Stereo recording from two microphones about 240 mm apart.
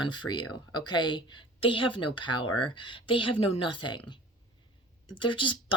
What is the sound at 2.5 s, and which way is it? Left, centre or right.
Speech, left.